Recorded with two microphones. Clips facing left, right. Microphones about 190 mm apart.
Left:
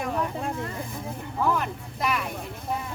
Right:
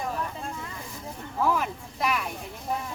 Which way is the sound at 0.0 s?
65° left (ahead or behind).